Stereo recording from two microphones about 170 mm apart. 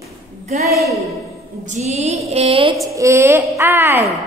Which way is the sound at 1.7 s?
40° right (ahead or behind).